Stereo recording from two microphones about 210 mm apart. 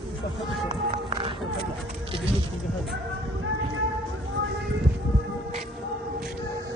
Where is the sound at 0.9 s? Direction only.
25° right (ahead or behind).